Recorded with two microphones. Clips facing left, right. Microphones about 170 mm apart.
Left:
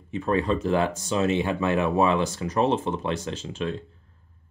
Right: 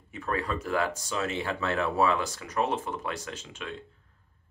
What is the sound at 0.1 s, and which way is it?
Speech, 25° left (ahead or behind).